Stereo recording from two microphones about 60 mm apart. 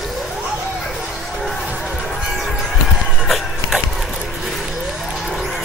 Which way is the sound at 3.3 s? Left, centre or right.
Centre.